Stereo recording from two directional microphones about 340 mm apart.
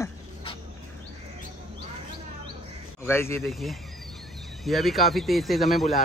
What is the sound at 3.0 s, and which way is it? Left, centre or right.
Speech, centre.